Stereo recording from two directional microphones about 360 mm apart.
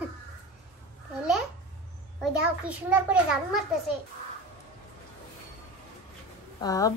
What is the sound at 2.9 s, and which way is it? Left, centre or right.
Speech, centre.